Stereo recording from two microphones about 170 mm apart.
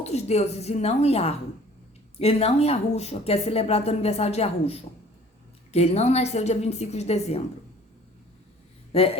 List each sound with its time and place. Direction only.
0.0 s a woman's voice: 40° left (ahead or behind)
8.9 s speech: 35° left (ahead or behind)